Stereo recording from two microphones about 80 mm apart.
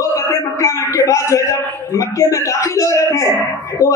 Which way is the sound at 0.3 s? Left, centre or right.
Left.